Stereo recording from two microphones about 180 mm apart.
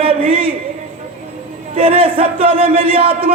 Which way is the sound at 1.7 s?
30° right (ahead or behind).